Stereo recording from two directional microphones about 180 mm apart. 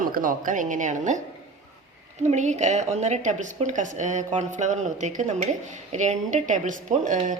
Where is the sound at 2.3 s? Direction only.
40° right (ahead or behind).